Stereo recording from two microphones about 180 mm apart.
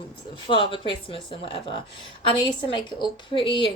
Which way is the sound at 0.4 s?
30° left (ahead or behind).